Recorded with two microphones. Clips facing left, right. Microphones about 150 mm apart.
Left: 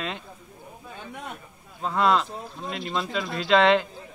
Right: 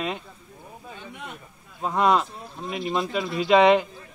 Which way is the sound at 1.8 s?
10° right (ahead or behind).